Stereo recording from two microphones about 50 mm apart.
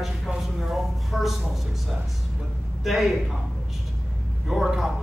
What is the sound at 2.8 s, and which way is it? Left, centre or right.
Speech, centre.